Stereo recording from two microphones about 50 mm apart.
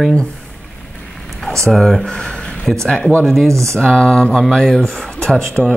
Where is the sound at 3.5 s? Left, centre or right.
Right.